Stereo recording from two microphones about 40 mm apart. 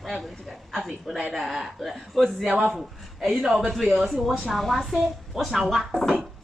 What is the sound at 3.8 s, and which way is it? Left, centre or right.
A woman's voice, centre.